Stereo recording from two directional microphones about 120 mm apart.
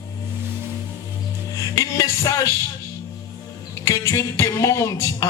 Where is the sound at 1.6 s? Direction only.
30° left (ahead or behind).